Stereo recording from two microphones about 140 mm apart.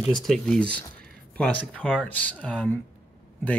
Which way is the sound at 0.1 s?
Centre (ahead or behind).